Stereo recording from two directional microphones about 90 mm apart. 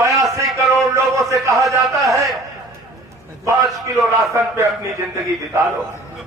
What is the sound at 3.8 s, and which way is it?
A man's voice, 35° right (ahead or behind).